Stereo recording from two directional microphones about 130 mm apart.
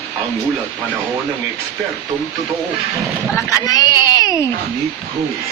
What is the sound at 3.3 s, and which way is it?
Speech, 30° left (ahead or behind).